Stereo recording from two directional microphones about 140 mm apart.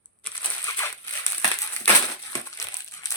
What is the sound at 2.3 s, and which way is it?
Crumpling, 25° left (ahead or behind).